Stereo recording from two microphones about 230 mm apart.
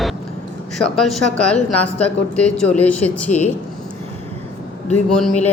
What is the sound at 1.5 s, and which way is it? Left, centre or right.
Speech, centre.